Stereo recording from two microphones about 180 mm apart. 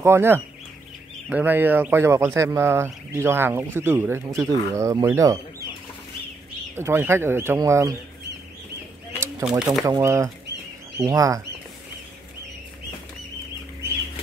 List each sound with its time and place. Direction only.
0.0 s speech: 15° right (ahead or behind)
6.7 s speech: 15° right (ahead or behind)
9.4 s speech: 5° right (ahead or behind)
9.8 s speech: 15° right (ahead or behind)